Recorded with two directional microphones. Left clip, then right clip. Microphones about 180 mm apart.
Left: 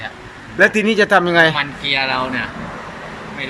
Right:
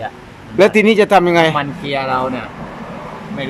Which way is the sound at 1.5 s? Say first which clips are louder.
Even; 35° right (ahead or behind).